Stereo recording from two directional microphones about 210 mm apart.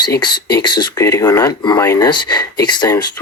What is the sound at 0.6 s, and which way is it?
Speech, 15° left (ahead or behind).